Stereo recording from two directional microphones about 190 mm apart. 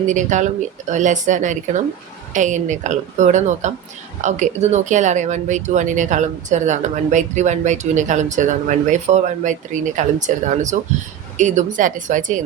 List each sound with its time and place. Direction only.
0.1 s a woman's voice: 40° right (ahead or behind)